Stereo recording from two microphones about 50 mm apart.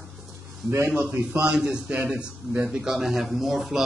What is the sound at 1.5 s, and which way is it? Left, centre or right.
A man's voice, centre.